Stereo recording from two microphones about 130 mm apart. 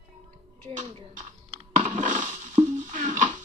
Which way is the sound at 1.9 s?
75° right (ahead or behind).